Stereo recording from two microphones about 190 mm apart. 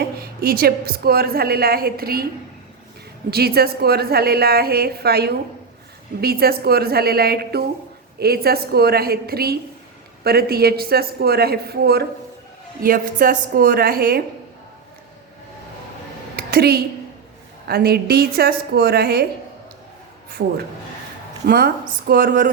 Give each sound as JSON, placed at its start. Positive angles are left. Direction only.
{"t": 0.2, "sound": "a woman's voice", "side_deg": -55}
{"t": 3.2, "sound": "a woman's voice", "side_deg": -55}
{"t": 16.3, "sound": "a sound", "side_deg": -55}
{"t": 17.7, "sound": "a woman's voice", "side_deg": -55}
{"t": 20.4, "sound": "a woman's voice", "side_deg": -60}